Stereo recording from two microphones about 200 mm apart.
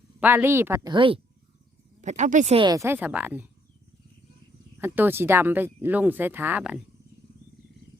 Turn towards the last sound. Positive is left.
turn(degrees=-5)  # may be behind; listen again after turning